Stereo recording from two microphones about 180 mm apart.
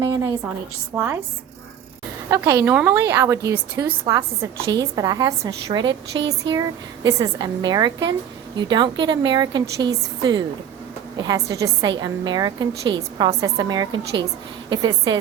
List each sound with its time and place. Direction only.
0.0 s a woman's voice: 20° right (ahead or behind)
2.3 s a woman's voice: 15° right (ahead or behind)